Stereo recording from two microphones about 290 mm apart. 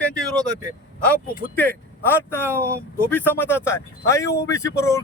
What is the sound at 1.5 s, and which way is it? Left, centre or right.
Speech, centre.